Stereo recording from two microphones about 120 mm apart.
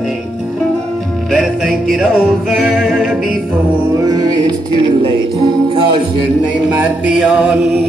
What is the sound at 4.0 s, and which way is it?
Music, 30° right (ahead or behind).